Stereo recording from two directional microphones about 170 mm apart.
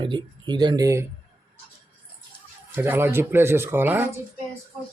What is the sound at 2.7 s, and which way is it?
Speech, 15° right (ahead or behind).